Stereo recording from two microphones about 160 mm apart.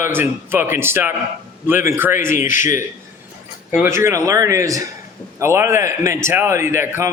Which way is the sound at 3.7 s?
15° right (ahead or behind).